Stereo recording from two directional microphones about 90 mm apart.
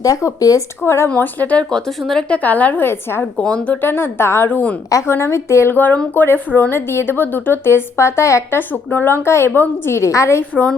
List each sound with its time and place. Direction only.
0.0 s speech: 35° left (ahead or behind)
0.9 s speech: 30° left (ahead or behind)
1.1 s speech: 20° left (ahead or behind)
2.4 s speech: 15° left (ahead or behind)
3.3 s speech: 10° left (ahead or behind); by 10.4 s 35° left (ahead or behind)
10.5 s speech: 15° left (ahead or behind)